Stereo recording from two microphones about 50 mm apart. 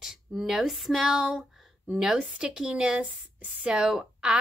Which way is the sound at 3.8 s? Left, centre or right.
Centre.